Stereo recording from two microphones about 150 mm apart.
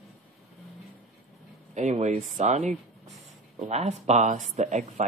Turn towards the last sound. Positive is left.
turn(degrees=-50)  # may be behind; listen again after turning